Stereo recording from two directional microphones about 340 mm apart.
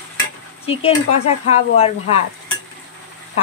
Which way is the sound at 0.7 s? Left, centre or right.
Centre.